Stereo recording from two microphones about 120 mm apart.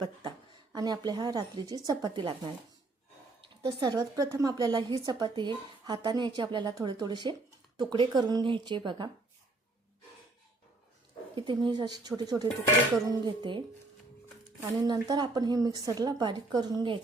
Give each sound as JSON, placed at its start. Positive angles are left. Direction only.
{"t": 0.2, "sound": "a sound", "side_deg": -45}
{"t": 0.8, "sound": "a woman's voice", "side_deg": -35}
{"t": 3.6, "sound": "a woman's voice", "side_deg": -40}
{"t": 11.3, "sound": "a woman's voice", "side_deg": -40}
{"t": 13.1, "sound": "dishes", "side_deg": -40}
{"t": 14.6, "sound": "a woman's voice", "side_deg": -30}